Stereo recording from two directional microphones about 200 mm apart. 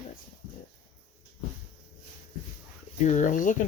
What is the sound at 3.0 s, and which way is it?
Speech, 40° left (ahead or behind).